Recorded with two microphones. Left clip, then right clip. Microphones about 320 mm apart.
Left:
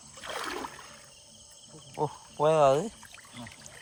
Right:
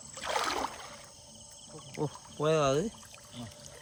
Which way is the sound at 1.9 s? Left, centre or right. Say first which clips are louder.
Left 6 dB; centre.